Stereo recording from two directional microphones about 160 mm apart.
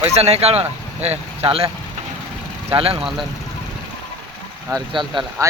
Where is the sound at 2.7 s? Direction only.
35° right (ahead or behind).